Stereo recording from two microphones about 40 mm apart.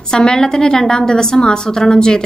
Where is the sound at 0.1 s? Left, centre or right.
Centre.